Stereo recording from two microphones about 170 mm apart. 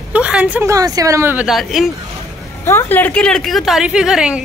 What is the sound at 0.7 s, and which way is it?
Speech, 20° right (ahead or behind).